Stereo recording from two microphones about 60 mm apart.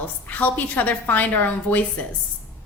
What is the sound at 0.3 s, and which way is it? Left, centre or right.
A woman's voice, left.